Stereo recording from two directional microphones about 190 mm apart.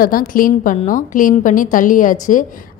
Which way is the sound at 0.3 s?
45° left (ahead or behind).